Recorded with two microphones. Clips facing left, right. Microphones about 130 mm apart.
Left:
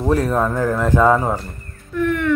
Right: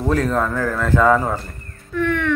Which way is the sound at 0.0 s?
10° left (ahead or behind).